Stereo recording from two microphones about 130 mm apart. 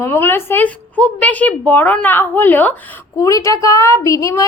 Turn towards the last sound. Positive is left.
turn(degrees=25)  # may be behind; listen again after turning